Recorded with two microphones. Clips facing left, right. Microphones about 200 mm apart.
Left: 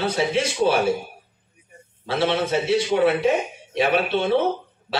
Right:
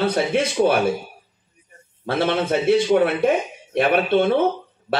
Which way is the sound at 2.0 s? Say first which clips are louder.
Right 1 dB; 55° right (ahead or behind).